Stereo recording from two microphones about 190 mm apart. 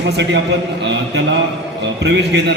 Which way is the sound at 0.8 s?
65° right (ahead or behind).